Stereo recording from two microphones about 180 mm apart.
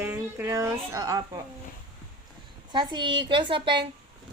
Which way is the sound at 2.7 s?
25° right (ahead or behind).